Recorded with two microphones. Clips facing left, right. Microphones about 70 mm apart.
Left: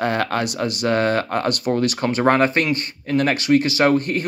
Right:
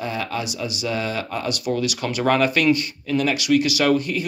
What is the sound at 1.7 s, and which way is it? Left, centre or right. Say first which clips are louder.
Speech: left 3 dB; left.